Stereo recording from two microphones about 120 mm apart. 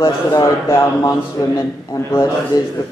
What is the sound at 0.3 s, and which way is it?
Speech, 25° left (ahead or behind).